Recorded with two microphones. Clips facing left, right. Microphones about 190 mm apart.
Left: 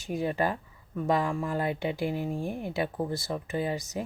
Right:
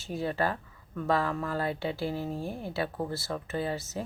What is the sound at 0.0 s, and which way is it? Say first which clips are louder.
Speech: left 2 dB; 15° left (ahead or behind).